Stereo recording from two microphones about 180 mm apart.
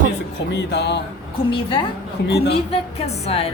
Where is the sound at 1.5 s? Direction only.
30° left (ahead or behind).